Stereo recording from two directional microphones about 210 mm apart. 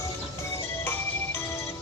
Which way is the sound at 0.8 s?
10° left (ahead or behind).